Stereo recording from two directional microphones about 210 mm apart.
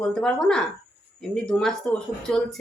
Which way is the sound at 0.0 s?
5° left (ahead or behind).